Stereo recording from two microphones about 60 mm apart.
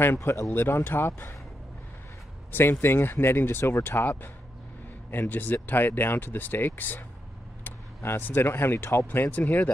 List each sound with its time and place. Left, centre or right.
0.0 s speech: left
2.5 s speech: left
9.0 s speech: left